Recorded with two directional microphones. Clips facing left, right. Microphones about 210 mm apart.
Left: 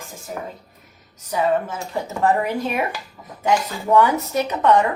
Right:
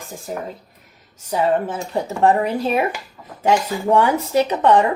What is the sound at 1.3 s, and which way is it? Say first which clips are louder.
Speech: right 2 dB; 30° right (ahead or behind).